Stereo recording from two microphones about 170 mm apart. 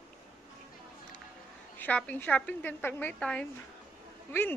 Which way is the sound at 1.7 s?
10° left (ahead or behind).